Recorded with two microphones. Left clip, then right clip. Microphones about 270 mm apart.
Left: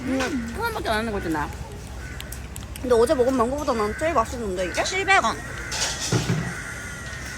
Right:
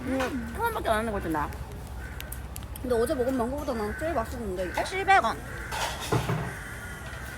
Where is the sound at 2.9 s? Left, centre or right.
Left.